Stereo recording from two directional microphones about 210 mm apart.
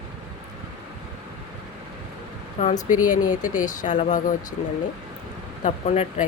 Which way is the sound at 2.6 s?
35° left (ahead or behind).